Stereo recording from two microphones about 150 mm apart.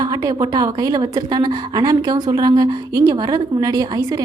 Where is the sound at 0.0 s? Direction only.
25° right (ahead or behind).